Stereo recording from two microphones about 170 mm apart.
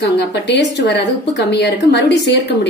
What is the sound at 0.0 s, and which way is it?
A woman's voice, 85° left.